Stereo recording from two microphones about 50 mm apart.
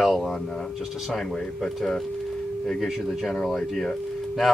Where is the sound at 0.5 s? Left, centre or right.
Centre.